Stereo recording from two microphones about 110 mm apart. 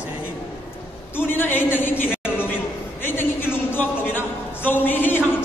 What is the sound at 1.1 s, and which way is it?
A man's voice, 20° left (ahead or behind).